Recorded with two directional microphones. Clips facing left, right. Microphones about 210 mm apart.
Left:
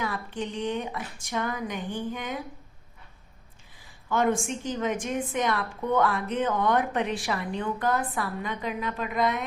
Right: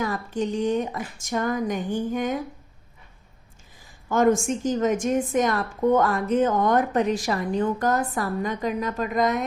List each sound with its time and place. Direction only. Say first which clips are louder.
0.0 s a woman's voice: right 6 dB; 40° right (ahead or behind)
4.1 s a woman's voice: right 5 dB; 45° right (ahead or behind)